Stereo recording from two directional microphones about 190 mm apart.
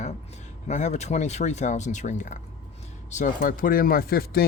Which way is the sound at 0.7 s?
35° left (ahead or behind).